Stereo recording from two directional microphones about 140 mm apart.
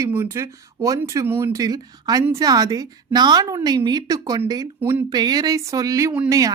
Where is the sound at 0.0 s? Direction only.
20° right (ahead or behind).